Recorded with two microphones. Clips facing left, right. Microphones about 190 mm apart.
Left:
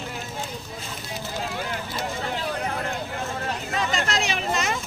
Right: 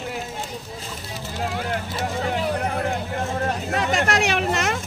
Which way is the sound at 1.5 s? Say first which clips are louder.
Right 4 dB; 55° right (ahead or behind).